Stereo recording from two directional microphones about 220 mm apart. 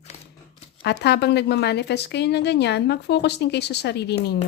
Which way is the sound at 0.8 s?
50° left (ahead or behind).